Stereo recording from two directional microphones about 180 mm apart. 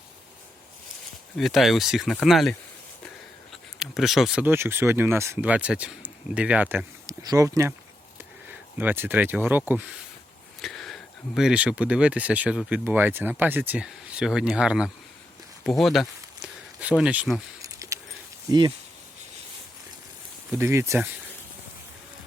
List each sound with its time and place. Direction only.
1.4 s speech: centre (ahead or behind)
10.6 s speech: centre (ahead or behind)
15.6 s a sound: centre (ahead or behind)
17.0 s speech: 5° right (ahead or behind)
17.6 s keys jangling: 20° right (ahead or behind)
20.5 s speech: 15° right (ahead or behind)